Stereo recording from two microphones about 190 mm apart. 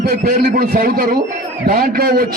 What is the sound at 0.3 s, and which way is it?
A man's voice, 50° right (ahead or behind).